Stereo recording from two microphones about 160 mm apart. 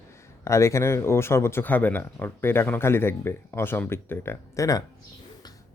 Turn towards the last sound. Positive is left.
turn(degrees=20)  # may be behind; listen again after turning